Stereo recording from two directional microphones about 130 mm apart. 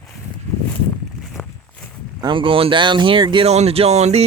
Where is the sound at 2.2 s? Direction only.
40° right (ahead or behind).